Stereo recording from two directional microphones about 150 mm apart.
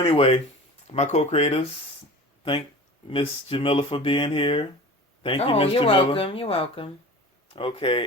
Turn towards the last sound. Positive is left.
turn(degrees=35)  # may be behind; listen again after turning